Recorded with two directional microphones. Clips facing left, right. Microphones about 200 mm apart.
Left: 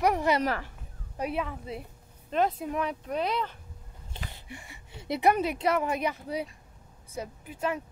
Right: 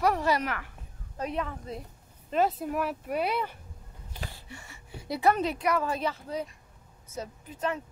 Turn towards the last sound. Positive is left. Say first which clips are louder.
# left 1 dB
turn(degrees=10)  # may be behind; listen again after turning